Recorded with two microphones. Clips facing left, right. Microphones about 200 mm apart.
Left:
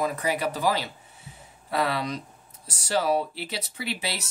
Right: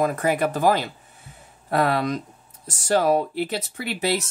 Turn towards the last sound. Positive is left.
turn(degrees=-50)  # may be behind; listen again after turning